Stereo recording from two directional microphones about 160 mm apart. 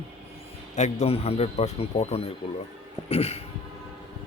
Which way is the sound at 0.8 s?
40° left (ahead or behind).